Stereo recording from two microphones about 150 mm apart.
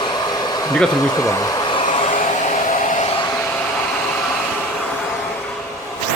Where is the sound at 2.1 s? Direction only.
50° left (ahead or behind).